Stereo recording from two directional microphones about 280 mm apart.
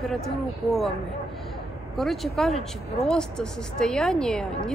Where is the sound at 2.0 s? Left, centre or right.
Centre.